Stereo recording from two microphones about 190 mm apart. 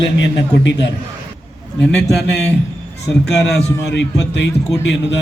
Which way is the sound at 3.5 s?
65° left (ahead or behind).